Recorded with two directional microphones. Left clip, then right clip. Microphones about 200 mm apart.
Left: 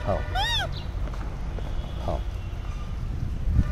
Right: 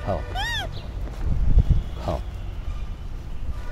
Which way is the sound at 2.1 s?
45° right (ahead or behind).